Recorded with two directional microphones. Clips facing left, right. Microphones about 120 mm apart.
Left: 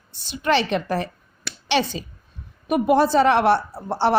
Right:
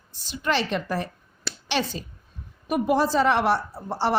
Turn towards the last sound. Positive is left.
turn(degrees=65)  # may be behind; listen again after turning